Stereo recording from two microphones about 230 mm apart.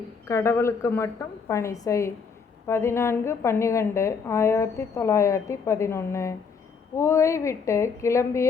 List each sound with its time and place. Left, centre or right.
0.3 s a woman's voice: centre